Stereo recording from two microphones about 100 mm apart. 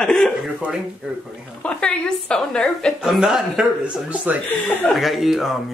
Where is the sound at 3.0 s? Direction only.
5° right (ahead or behind).